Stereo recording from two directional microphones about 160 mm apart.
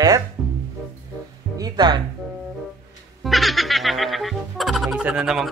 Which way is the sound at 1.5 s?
25° right (ahead or behind).